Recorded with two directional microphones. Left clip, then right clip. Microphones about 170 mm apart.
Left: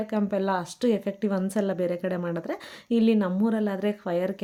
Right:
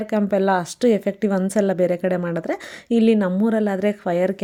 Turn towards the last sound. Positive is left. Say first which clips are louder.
# right 7 dB
turn(degrees=-30)  # may be behind; listen again after turning